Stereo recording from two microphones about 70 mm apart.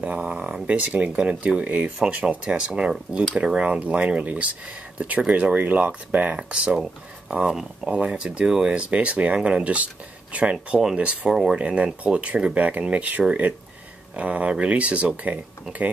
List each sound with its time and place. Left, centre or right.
0.0 s speech: centre
6.8 s speech: centre